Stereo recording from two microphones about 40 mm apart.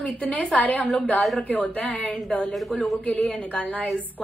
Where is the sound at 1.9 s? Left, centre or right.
Left.